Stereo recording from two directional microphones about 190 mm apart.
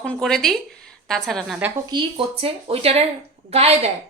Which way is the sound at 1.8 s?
25° right (ahead or behind).